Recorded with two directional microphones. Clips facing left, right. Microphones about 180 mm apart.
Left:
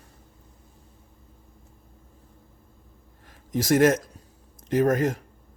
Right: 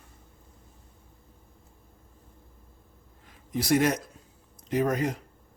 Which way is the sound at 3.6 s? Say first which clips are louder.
Left 5 dB; 45° left (ahead or behind).